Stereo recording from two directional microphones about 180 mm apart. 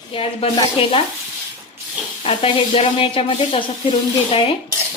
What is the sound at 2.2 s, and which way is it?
A woman's voice, 30° left (ahead or behind).